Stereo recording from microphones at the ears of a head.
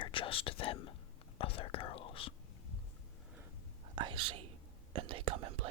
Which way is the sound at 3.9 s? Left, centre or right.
Right.